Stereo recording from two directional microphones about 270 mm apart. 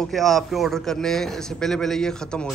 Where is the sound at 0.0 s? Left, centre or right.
Centre.